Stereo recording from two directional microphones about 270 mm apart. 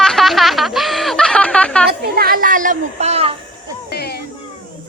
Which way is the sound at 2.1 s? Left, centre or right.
Right.